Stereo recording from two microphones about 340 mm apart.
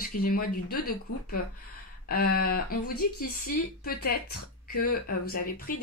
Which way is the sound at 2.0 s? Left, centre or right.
Left.